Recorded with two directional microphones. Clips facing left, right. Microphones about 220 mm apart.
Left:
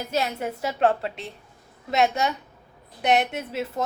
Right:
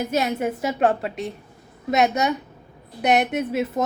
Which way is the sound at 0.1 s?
15° right (ahead or behind).